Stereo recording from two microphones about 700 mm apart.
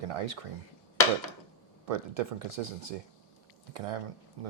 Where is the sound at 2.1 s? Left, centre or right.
Right.